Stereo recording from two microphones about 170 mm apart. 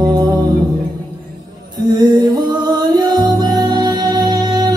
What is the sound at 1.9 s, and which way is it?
Music, 25° right (ahead or behind).